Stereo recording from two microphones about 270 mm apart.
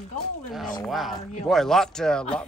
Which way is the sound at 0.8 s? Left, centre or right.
Centre.